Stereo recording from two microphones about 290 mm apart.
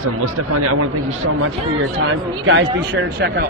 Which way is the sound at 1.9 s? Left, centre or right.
Right.